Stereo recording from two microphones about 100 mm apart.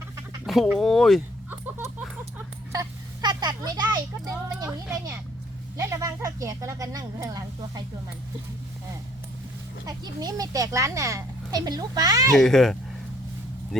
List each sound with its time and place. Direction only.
0.4 s speech: centre (ahead or behind)
1.5 s a sound: 20° right (ahead or behind)
2.7 s a sound: 45° right (ahead or behind)
5.7 s a child's voice: 30° right (ahead or behind)
9.8 s a child's voice: 40° right (ahead or behind)
12.3 s speech: 5° left (ahead or behind)